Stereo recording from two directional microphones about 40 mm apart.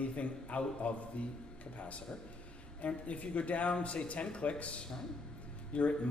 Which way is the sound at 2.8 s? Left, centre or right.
Left.